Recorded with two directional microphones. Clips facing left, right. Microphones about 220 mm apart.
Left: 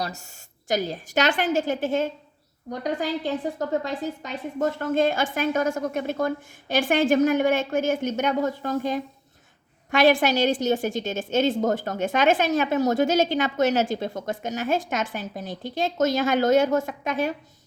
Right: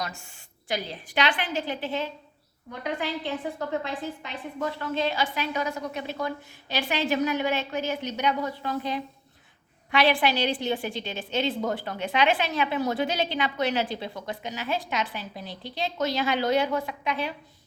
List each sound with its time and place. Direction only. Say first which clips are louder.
0.0 s a woman's voice: left 4 dB; 40° left (ahead or behind)